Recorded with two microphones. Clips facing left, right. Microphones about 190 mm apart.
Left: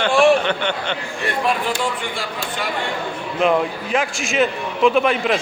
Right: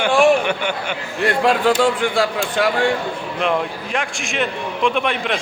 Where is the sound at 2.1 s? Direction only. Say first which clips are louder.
Right 8 dB; 90° right.